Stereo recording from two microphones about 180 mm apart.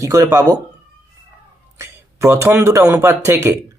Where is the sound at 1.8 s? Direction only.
15° right (ahead or behind).